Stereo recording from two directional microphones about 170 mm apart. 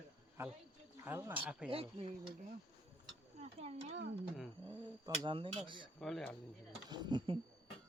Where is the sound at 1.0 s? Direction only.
10° right (ahead or behind).